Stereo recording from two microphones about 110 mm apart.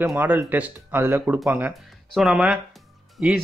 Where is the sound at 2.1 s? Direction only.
5° right (ahead or behind).